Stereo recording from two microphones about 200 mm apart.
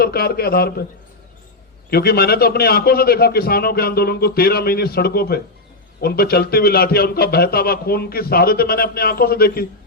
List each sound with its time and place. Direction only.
0.0 s a man's voice: 50° left (ahead or behind)
1.9 s a man's voice: 50° left (ahead or behind)